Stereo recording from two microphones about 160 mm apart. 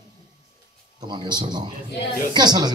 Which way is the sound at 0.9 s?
25° right (ahead or behind).